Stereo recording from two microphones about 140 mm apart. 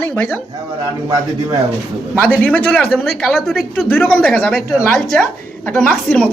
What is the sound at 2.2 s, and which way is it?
Speech, 10° left (ahead or behind).